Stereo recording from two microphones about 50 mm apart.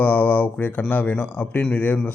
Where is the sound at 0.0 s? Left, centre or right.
Left.